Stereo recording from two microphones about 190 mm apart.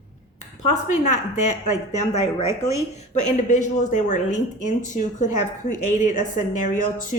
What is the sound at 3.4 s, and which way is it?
A woman's voice, 40° left (ahead or behind).